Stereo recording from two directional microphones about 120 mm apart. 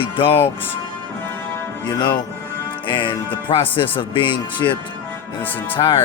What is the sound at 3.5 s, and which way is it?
Speech, 50° left (ahead or behind).